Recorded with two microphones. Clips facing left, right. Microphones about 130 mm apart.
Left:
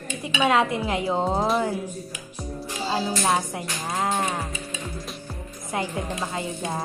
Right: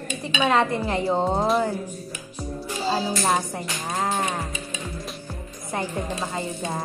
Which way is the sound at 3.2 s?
5° left (ahead or behind).